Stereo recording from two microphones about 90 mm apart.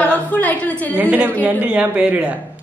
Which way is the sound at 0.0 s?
20° left (ahead or behind).